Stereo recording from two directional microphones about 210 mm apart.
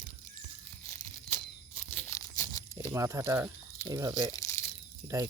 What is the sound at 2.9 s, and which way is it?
Speech, 15° right (ahead or behind).